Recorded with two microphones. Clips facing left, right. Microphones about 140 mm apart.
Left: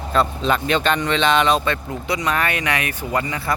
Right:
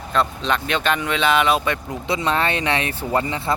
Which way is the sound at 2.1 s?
25° right (ahead or behind).